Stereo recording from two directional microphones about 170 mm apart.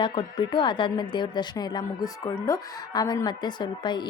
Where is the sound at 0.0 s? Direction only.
25° left (ahead or behind).